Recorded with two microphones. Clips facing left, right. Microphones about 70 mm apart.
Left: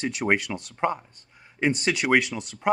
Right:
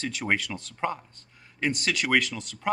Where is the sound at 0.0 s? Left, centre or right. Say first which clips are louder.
Left 4 dB; centre.